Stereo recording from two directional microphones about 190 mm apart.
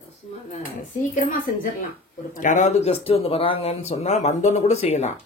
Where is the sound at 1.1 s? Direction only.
45° left (ahead or behind).